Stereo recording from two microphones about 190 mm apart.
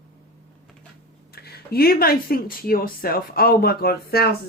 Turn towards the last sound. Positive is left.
turn(degrees=55)  # may be behind; listen again after turning